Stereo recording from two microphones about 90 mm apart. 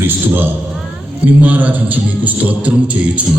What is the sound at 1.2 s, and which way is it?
Music, 15° right (ahead or behind).